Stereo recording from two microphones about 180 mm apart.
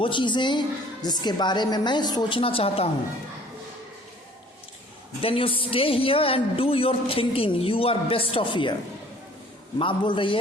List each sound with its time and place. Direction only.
0.0 s a woman's voice: 25° left (ahead or behind)
5.2 s speech: 30° left (ahead or behind)
9.7 s a woman's voice: 30° left (ahead or behind)